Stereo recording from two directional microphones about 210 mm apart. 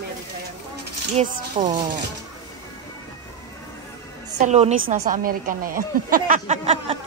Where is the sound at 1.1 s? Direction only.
30° right (ahead or behind).